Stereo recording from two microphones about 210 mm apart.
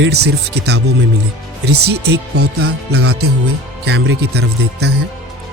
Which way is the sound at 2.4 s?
90° right.